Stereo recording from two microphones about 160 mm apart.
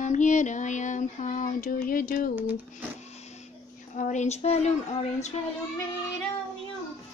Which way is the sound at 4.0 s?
45° left (ahead or behind).